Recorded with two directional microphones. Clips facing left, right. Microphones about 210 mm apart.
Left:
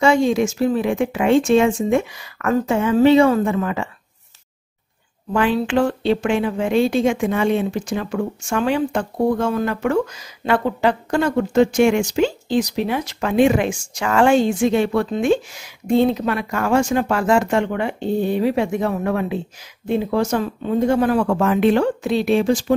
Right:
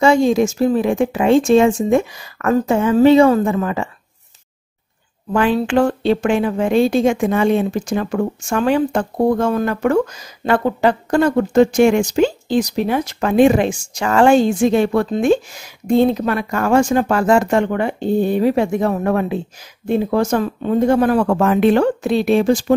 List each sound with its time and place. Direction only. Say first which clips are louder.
0.0 s a woman's voice: right 3 dB; 40° right (ahead or behind)
5.3 s a woman's voice: right 2 dB; 45° right (ahead or behind)